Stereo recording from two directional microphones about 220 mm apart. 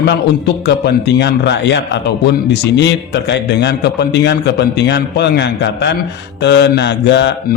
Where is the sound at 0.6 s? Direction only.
50° left (ahead or behind).